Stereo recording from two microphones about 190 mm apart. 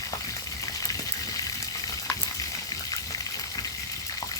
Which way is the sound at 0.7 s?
20° left (ahead or behind).